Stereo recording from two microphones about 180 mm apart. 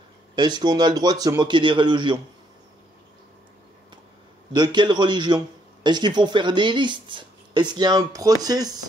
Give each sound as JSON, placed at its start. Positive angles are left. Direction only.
{"t": 0.4, "sound": "speech", "side_deg": -25}
{"t": 4.5, "sound": "speech", "side_deg": -25}